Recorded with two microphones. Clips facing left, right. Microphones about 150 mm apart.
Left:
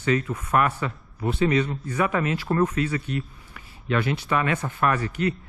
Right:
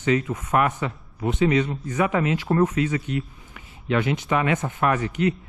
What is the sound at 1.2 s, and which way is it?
Speech, 15° right (ahead or behind).